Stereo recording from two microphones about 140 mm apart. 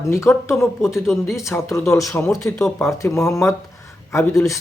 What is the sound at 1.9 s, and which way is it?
Speech, 25° left (ahead or behind).